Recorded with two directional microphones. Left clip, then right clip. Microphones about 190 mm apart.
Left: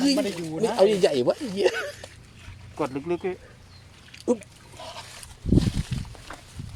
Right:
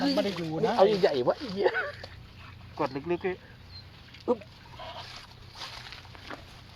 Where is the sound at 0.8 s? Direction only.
55° left (ahead or behind).